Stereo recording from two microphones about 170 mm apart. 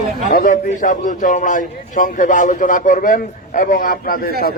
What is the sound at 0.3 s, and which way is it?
A man's voice, 50° left (ahead or behind).